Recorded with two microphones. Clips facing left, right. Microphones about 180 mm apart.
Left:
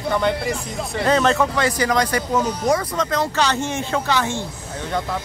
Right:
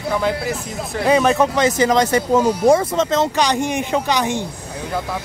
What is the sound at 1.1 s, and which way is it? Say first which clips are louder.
Speech: right 3 dB; 15° right (ahead or behind).